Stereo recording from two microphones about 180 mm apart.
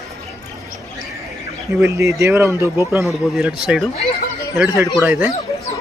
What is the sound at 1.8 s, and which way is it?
Speech, 15° right (ahead or behind).